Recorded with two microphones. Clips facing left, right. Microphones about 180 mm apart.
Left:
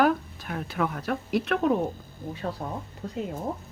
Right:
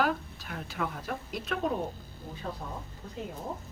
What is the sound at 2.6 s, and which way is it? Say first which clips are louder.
Speech: left 7 dB; 65° left (ahead or behind).